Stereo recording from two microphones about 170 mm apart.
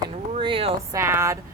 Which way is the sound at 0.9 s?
15° right (ahead or behind).